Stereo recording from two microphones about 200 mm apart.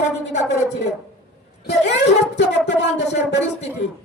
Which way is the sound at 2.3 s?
60° left (ahead or behind).